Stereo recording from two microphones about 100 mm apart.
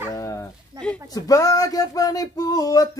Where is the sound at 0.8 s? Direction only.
10° left (ahead or behind).